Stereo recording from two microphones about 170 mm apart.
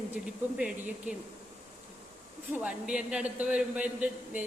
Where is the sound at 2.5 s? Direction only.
5° right (ahead or behind).